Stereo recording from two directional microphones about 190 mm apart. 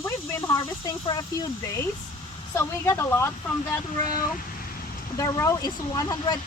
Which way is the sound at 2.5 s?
15° left (ahead or behind).